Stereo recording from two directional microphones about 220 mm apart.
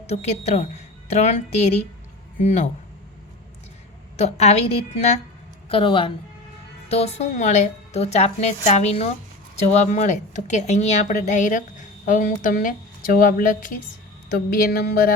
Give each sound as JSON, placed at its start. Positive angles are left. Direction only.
{"t": 0.1, "sound": "a woman's voice", "side_deg": 30}
{"t": 4.2, "sound": "a woman's voice", "side_deg": 30}
{"t": 14.3, "sound": "a sound", "side_deg": 40}